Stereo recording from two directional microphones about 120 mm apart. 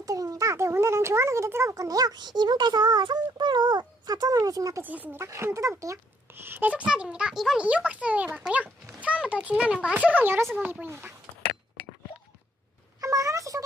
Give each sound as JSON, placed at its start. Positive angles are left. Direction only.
{"t": 0.0, "sound": "a child's voice", "side_deg": -30}
{"t": 4.8, "sound": "a child's voice", "side_deg": -15}
{"t": 13.0, "sound": "a sound", "side_deg": -30}